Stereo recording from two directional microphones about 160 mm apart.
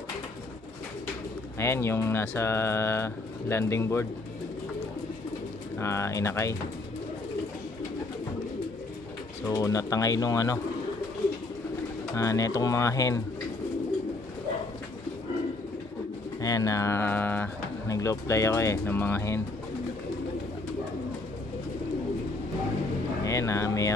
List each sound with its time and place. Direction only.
1.6 s speech: 15° left (ahead or behind)
5.8 s speech: 15° left (ahead or behind)
9.5 s speech: 20° left (ahead or behind)
12.2 s speech: 20° left (ahead or behind)
16.3 s speech: 20° left (ahead or behind)
23.2 s a sound: 20° left (ahead or behind)